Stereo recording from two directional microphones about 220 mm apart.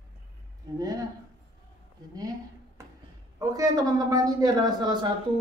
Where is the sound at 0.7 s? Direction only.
15° right (ahead or behind).